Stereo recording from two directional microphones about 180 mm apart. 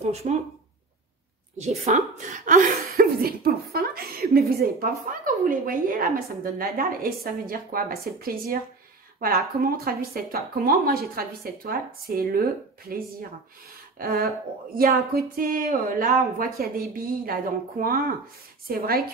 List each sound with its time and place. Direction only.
0.0 s speech: 35° right (ahead or behind)
1.6 s speech: 40° right (ahead or behind); by 12.4 s 55° right (ahead or behind)
13.9 s speech: 55° right (ahead or behind)